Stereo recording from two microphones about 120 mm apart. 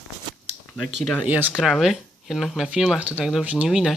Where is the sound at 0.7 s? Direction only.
5° right (ahead or behind).